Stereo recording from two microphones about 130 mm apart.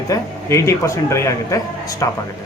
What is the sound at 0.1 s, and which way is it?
A man's voice, 25° left (ahead or behind).